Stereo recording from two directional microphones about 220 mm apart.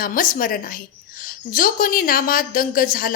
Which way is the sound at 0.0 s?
40° left (ahead or behind).